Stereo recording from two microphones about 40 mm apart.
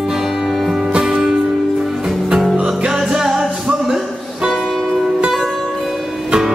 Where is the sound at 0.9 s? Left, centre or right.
Right.